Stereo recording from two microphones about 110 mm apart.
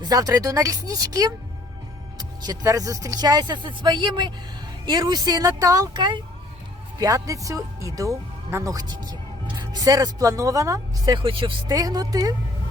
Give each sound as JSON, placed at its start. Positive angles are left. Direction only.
{"t": 0.0, "sound": "speech", "side_deg": -35}
{"t": 7.0, "sound": "speech", "side_deg": -30}
{"t": 11.2, "sound": "speech", "side_deg": -50}
{"t": 11.7, "sound": "speech", "side_deg": -35}